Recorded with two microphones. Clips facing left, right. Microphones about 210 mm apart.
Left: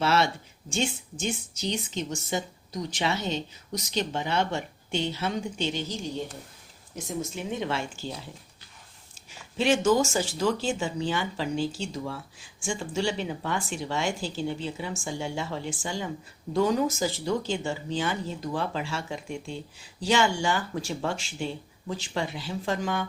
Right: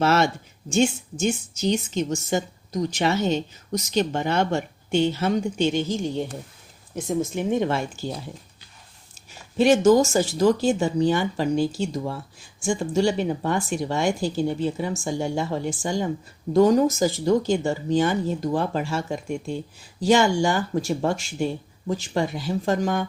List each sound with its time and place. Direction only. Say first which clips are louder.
0.0 s speech: right 4 dB; 45° right (ahead or behind)
9.6 s speech: right 6 dB; 40° right (ahead or behind)